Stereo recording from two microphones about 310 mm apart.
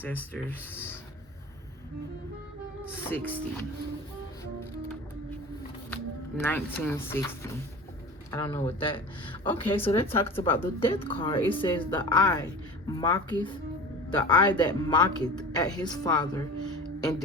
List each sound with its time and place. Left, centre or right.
0.0 s speech: centre
3.1 s speech: centre
5.9 s speech: centre
17.0 s music: centre